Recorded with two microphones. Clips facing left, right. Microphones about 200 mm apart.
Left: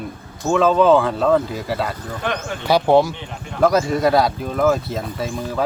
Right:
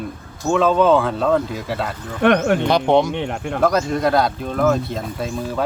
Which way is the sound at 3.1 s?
65° right (ahead or behind).